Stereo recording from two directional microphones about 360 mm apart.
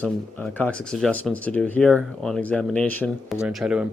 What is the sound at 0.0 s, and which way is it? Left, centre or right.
Speech, centre.